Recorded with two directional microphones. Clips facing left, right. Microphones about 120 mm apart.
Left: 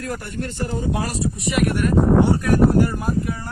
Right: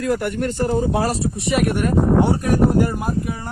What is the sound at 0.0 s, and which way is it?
Speech, 85° right.